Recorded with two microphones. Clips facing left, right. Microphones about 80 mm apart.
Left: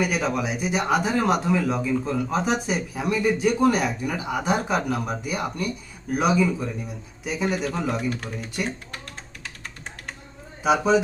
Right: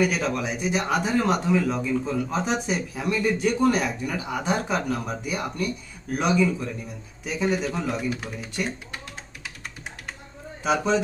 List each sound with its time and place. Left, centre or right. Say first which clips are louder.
0.0 s speech: even; centre
10.6 s a man's voice: left 3 dB; centre